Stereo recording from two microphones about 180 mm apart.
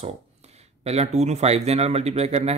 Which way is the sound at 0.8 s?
35° right (ahead or behind).